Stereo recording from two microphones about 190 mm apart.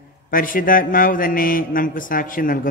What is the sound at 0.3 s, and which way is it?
A man's voice, 45° left (ahead or behind).